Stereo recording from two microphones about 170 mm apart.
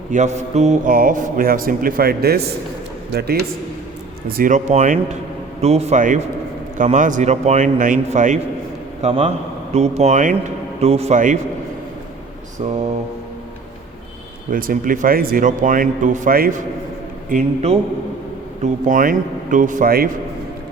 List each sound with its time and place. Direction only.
0.1 s a man's voice: 45° right (ahead or behind); by 3.4 s 75° right (ahead or behind)
4.3 s a man's voice: 55° right (ahead or behind)
9.0 s a man's voice: 35° right (ahead or behind)
14.5 s speech: 55° right (ahead or behind)
17.2 s speech: 45° right (ahead or behind); by 20.1 s 60° right (ahead or behind)